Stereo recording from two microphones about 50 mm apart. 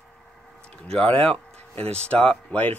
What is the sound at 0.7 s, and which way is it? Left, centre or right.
A man's voice, centre.